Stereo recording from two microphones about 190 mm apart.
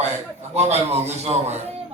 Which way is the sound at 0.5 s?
35° right (ahead or behind).